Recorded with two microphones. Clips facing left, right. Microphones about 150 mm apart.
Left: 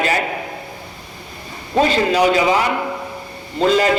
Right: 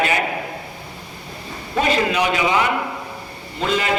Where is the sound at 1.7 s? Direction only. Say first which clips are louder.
Left 4 dB; 30° left (ahead or behind).